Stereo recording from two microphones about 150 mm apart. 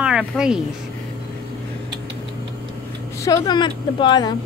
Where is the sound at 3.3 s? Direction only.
30° left (ahead or behind).